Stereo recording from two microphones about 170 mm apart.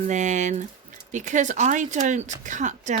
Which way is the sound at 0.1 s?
45° right (ahead or behind).